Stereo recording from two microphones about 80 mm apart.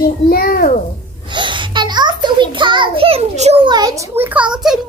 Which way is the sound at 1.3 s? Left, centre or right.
Right.